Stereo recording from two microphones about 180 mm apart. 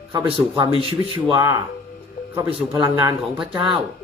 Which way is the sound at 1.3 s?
25° right (ahead or behind).